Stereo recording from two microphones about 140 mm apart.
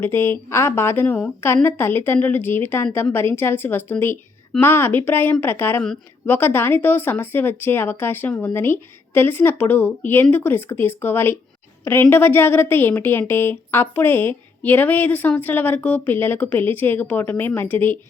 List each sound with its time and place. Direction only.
0.0 s a woman's voice: 15° left (ahead or behind)